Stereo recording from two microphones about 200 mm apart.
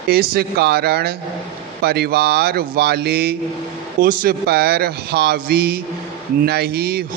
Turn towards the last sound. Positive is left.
turn(degrees=-50)  # may be behind; listen again after turning